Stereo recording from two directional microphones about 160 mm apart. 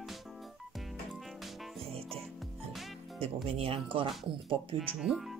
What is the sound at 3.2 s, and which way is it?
Speech, 35° right (ahead or behind).